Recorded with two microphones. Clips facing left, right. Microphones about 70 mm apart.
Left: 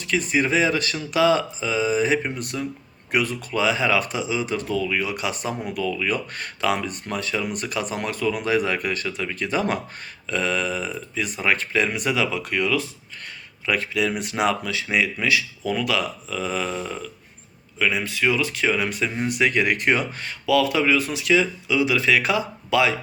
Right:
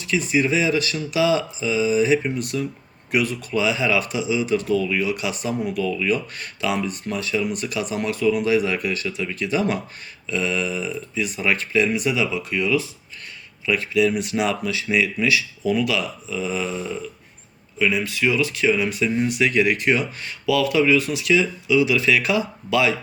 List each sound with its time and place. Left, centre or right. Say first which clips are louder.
0.0 s speech: right 1 dB; left
13.7 s speech: right 4 dB; left
17.8 s speech: right 1 dB; left